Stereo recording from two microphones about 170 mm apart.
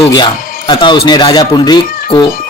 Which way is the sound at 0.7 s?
25° left (ahead or behind).